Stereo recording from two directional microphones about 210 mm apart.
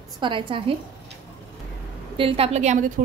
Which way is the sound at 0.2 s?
25° right (ahead or behind).